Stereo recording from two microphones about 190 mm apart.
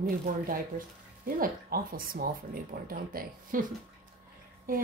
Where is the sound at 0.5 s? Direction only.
45° right (ahead or behind).